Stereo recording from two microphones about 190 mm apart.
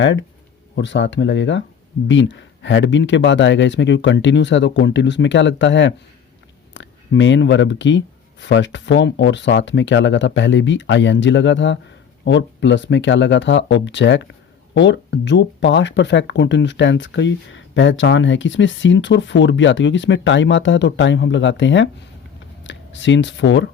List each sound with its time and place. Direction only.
0.0 s speech: 75° left (ahead or behind)